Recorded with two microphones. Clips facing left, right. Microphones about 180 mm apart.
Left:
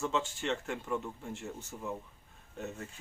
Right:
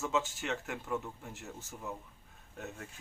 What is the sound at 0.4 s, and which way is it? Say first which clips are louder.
Speech: left 3 dB; 5° right (ahead or behind).